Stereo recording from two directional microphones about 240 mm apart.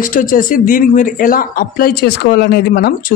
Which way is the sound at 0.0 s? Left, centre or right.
Left.